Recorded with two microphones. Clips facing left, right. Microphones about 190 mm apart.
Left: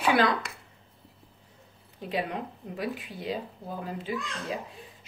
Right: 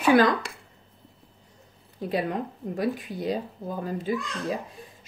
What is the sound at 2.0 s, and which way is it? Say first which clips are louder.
Speech: right 4 dB; 40° right (ahead or behind).